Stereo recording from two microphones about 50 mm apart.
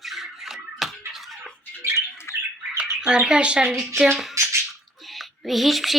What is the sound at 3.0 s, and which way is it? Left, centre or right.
Speech, centre.